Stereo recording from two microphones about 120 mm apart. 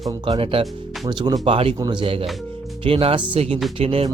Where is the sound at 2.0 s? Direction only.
50° right (ahead or behind).